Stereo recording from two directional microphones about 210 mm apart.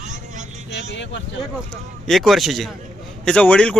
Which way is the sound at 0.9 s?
60° left (ahead or behind).